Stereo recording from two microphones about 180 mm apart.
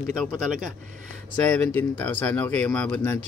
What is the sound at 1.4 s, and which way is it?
Speech, 5° left (ahead or behind).